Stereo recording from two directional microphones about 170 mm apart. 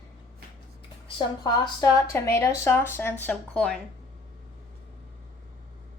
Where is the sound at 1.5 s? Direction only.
15° left (ahead or behind).